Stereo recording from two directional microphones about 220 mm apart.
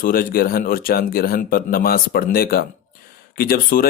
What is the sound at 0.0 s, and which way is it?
Speech, 40° left (ahead or behind).